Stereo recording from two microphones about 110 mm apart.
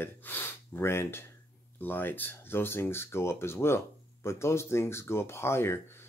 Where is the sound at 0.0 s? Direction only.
20° left (ahead or behind).